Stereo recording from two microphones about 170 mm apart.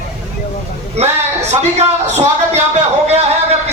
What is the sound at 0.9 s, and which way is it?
Speech, 40° right (ahead or behind).